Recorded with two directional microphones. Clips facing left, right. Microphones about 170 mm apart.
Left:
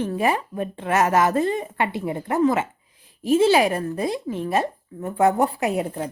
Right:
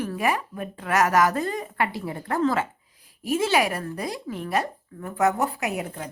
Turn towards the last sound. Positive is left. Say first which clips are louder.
# left 6 dB
turn(degrees=35)  # may be behind; listen again after turning